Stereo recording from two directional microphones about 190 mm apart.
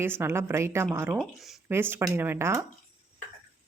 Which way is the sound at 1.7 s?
10° right (ahead or behind).